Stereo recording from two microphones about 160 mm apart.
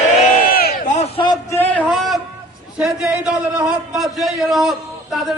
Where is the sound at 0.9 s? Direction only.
30° left (ahead or behind).